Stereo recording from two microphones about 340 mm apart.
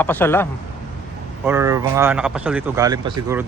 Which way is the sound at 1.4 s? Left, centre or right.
Centre.